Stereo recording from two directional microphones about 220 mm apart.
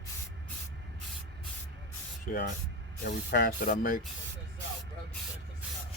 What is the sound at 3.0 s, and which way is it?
Speech, 45° left (ahead or behind).